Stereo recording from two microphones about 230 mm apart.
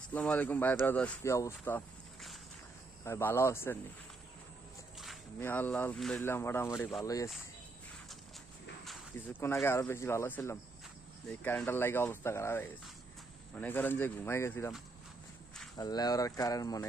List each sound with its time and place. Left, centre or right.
0.1 s speech: centre
3.0 s speech: centre
5.4 s speech: centre
8.8 s speech: centre
15.8 s speech: centre